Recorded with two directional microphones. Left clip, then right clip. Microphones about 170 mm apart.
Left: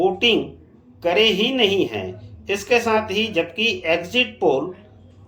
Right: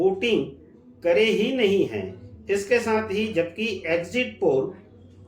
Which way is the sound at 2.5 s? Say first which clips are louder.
Left 3 dB; 20° left (ahead or behind).